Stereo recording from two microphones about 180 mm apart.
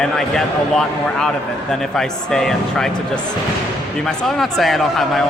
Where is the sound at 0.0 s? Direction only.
Centre (ahead or behind).